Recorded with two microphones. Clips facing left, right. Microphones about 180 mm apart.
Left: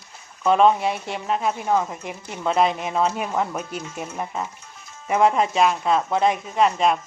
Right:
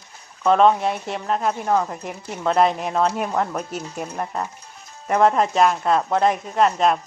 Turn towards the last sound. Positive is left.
turn(degrees=0)  # may be behind; listen again after turning